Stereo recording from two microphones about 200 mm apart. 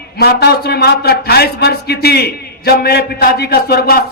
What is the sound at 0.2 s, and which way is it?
Mantra, 55° left (ahead or behind).